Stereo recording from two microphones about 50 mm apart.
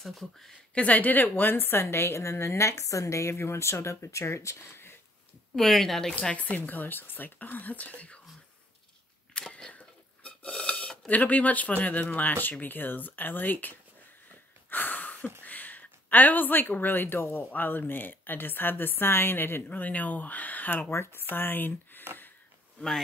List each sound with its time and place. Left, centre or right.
0.0 s speech: centre
0.7 s a woman's voice: left
5.6 s speech: centre
6.3 s speech: left
9.5 s a sound: centre
11.1 s speech: left
14.7 s a sound: left
15.4 s speech: left
19.8 s speech: left
20.9 s speech: left